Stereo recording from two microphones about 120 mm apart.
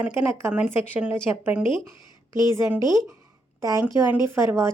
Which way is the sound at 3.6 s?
30° right (ahead or behind).